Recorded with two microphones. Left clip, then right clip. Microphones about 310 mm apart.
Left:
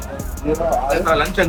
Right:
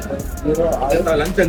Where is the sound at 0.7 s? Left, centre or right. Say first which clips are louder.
Even; centre.